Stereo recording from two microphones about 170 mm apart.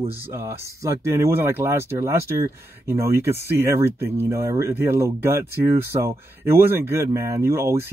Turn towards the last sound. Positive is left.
turn(degrees=-15)  # may be behind; listen again after turning